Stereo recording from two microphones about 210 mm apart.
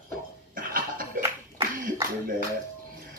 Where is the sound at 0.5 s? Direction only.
40° right (ahead or behind).